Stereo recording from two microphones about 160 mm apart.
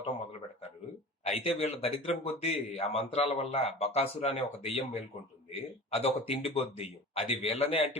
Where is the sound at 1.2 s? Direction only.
40° left (ahead or behind).